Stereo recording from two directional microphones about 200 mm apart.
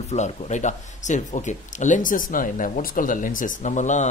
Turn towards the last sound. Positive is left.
turn(degrees=35)  # may be behind; listen again after turning